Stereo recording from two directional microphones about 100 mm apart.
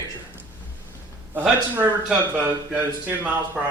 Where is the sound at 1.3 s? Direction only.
15° right (ahead or behind).